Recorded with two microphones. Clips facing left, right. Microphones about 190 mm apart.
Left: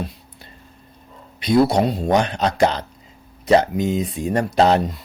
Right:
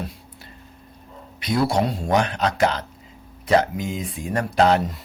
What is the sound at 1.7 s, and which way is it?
Speech, 20° left (ahead or behind).